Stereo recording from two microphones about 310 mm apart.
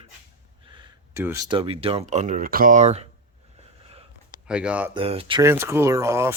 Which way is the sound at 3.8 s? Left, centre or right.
Centre.